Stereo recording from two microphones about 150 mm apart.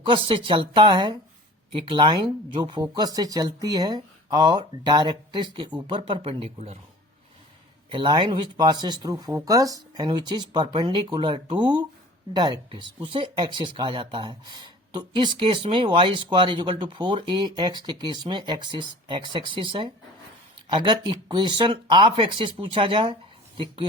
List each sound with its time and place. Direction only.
0.0 s speech: 35° right (ahead or behind)
7.9 s speech: 30° right (ahead or behind)